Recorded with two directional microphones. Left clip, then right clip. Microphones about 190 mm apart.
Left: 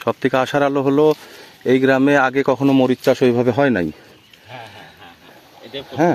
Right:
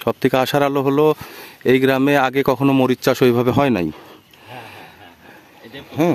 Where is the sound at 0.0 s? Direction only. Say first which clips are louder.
Even; 35° right (ahead or behind).